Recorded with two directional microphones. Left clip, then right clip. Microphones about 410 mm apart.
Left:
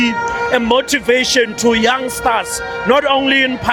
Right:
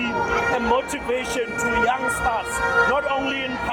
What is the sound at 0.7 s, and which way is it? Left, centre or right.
A man's voice, left.